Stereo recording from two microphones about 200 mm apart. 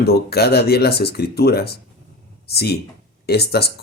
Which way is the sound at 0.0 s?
50° left (ahead or behind).